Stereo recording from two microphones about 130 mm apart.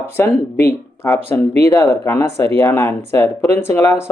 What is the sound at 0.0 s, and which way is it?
Speech, 20° left (ahead or behind).